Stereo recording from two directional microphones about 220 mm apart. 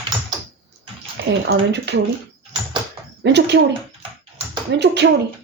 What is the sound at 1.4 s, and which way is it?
Speech, 50° right (ahead or behind).